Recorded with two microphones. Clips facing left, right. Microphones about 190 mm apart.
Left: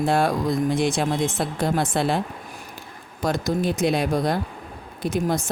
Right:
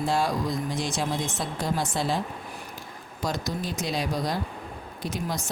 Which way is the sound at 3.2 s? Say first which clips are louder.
Left 7 dB; 55° left (ahead or behind).